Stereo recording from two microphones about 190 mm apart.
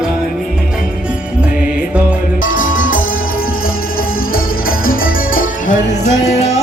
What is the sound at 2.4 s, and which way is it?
Music, 45° left (ahead or behind).